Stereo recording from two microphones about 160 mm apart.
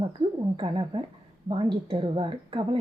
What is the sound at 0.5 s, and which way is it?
Speech, 35° right (ahead or behind).